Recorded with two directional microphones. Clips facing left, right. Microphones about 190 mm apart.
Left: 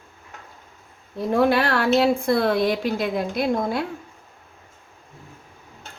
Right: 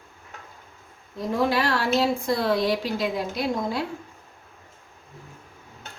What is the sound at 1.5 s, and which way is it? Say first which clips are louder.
A woman's voice: left 4 dB; 60° left (ahead or behind).